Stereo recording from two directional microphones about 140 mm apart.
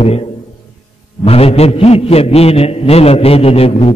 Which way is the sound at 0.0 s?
45° left (ahead or behind).